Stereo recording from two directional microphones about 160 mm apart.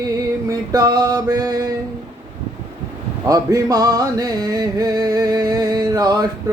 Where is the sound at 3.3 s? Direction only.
25° right (ahead or behind).